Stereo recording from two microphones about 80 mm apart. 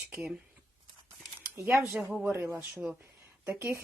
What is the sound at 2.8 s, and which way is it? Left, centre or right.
Speech, centre.